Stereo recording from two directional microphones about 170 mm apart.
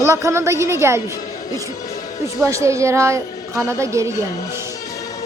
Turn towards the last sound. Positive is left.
turn(degrees=-15)  # may be behind; listen again after turning